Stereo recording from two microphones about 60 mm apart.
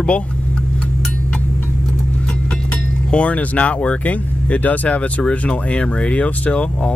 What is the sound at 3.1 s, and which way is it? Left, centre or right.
Speech, left.